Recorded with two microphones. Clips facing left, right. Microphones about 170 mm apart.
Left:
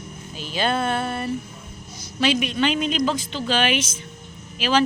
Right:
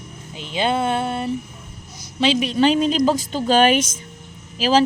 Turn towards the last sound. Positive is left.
turn(degrees=-35)  # may be behind; listen again after turning